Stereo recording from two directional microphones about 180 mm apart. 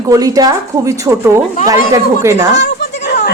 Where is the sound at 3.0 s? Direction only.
65° left (ahead or behind).